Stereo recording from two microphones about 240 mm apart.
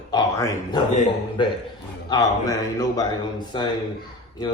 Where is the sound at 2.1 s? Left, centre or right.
Centre.